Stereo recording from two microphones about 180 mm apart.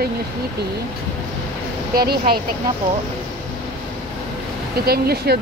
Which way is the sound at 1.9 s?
60° right (ahead or behind).